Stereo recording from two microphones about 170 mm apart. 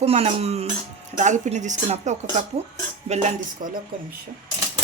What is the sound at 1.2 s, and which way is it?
Speech, 45° right (ahead or behind).